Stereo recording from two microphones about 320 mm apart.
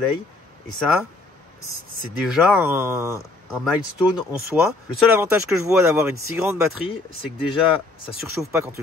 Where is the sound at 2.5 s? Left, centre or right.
Centre.